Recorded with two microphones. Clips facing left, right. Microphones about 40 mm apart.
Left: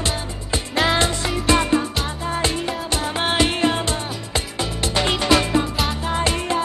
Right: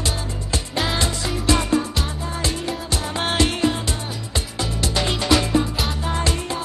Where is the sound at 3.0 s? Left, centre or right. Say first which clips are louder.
Left 1 dB; centre.